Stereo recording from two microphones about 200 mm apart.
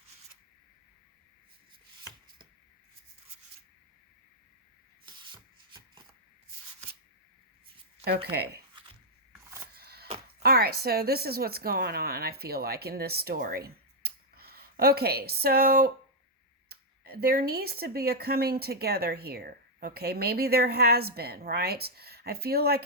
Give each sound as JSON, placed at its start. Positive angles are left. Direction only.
{"t": 5.0, "sound": "rub", "side_deg": -25}
{"t": 8.0, "sound": "speech", "side_deg": -55}
{"t": 9.7, "sound": "a sound", "side_deg": -50}
{"t": 10.4, "sound": "speech", "side_deg": -50}